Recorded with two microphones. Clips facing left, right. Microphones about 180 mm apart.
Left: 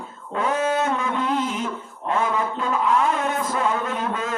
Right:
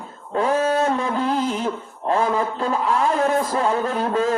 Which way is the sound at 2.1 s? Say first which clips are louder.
Right 3 dB; 35° right (ahead or behind).